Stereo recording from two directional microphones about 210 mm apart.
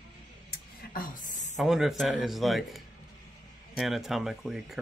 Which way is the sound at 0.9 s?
40° left (ahead or behind).